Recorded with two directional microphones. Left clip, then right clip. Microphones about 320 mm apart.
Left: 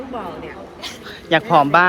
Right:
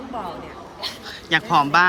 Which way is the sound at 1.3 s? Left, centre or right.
Centre.